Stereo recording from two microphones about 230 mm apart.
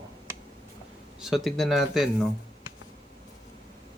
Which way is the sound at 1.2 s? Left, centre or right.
Centre.